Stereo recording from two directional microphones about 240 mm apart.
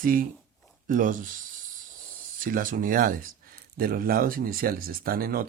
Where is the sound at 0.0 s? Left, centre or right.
Right.